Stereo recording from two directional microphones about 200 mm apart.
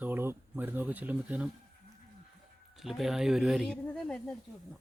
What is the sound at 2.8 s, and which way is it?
Speech, centre (ahead or behind).